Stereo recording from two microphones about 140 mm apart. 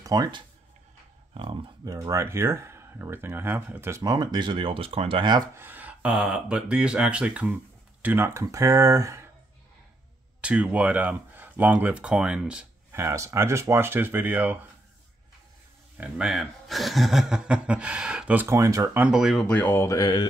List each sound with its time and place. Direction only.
0.0 s speech: 30° right (ahead or behind)
1.3 s speech: 40° right (ahead or behind)
1.9 s speech: 25° right (ahead or behind)
5.6 s speech: 15° right (ahead or behind)
10.4 s speech: 10° right (ahead or behind)
12.9 s speech: 20° right (ahead or behind)
16.0 s speech: 5° right (ahead or behind); by 18.9 s 20° right (ahead or behind)
18.9 s speech: 5° right (ahead or behind); by 20.2 s 30° left (ahead or behind)